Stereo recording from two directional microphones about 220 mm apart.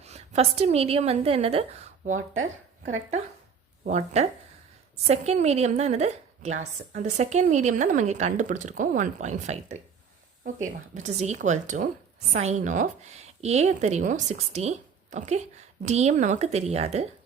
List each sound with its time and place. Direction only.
0.0 s a woman's voice: 30° right (ahead or behind)
3.8 s a woman's voice: 30° right (ahead or behind)